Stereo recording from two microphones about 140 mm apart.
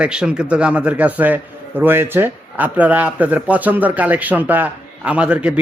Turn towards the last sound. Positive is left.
turn(degrees=-10)  # may be behind; listen again after turning